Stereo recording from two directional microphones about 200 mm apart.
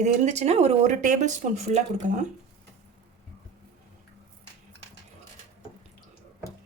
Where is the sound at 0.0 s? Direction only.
35° right (ahead or behind).